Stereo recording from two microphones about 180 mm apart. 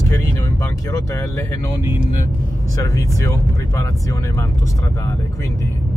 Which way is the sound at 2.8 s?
15° left (ahead or behind).